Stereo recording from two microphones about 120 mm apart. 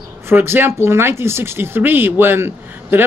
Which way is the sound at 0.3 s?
20° right (ahead or behind).